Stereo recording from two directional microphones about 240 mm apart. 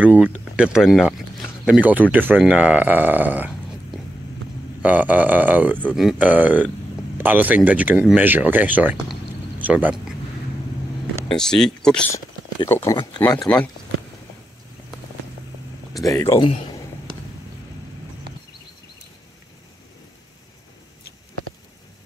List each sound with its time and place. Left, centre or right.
0.0 s speech: centre
11.2 s speech: centre
12.5 s speech: centre
16.1 s speech: centre